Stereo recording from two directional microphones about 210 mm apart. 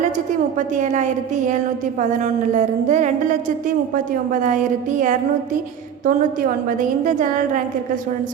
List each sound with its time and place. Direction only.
0.8 s a woman's voice: 35° right (ahead or behind)